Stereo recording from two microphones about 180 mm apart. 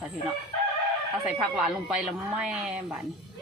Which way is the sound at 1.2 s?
5° right (ahead or behind).